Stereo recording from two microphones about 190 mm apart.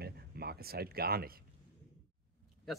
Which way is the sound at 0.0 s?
55° right (ahead or behind).